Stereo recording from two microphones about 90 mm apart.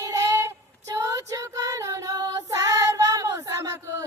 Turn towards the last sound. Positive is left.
turn(degrees=-40)  # may be behind; listen again after turning